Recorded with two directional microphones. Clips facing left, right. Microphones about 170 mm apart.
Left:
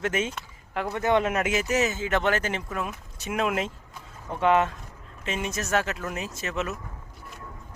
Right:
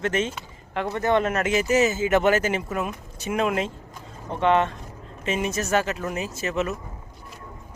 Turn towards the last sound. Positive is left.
turn(degrees=0)  # may be behind; listen again after turning